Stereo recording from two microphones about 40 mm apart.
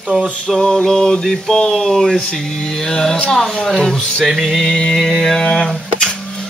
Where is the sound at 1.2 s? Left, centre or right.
Centre.